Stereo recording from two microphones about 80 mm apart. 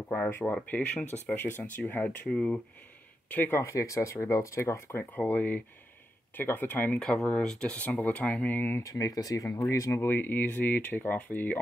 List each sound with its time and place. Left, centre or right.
0.3 s speech: left
2.2 s speech: centre
3.3 s speech: left
3.6 s speech: left
5.3 s speech: left
7.0 s speech: centre
8.8 s speech: left
10.0 s speech: left